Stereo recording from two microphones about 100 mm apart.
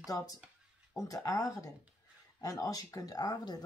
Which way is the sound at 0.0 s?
35° left (ahead or behind).